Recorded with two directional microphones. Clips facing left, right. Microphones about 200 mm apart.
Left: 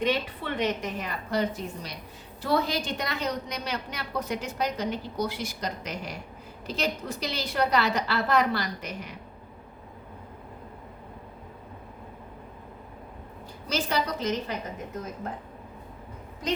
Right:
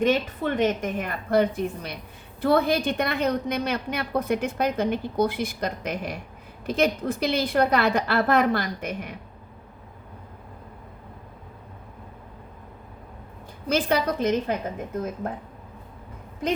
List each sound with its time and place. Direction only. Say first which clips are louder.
0.0 s a woman's voice: right 5 dB; 45° right (ahead or behind)
13.7 s a woman's voice: right 5 dB; 55° right (ahead or behind)